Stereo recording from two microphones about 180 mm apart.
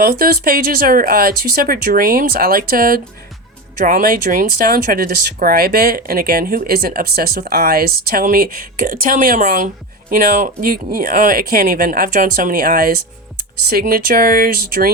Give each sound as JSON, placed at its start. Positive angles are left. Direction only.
{"t": 0.0, "sound": "speech", "side_deg": -55}